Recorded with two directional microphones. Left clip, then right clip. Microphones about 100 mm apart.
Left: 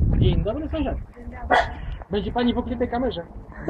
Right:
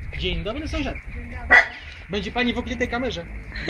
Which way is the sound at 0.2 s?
45° right (ahead or behind).